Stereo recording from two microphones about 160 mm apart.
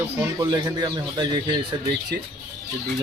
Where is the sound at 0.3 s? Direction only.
25° right (ahead or behind).